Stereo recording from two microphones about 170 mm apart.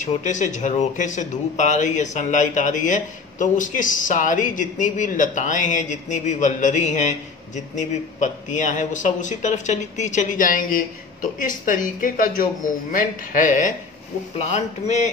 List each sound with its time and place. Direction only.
0.0 s a man's voice: 45° left (ahead or behind)